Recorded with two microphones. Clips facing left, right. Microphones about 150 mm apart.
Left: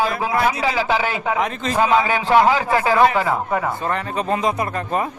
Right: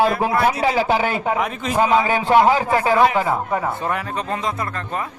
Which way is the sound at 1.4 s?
10° right (ahead or behind).